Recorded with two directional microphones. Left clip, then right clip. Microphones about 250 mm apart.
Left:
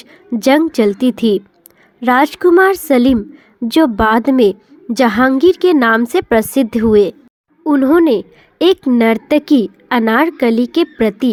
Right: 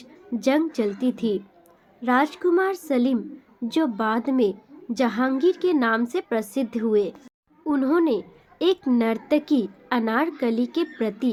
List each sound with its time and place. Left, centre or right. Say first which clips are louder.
0.0 s a woman's voice: left 9 dB; left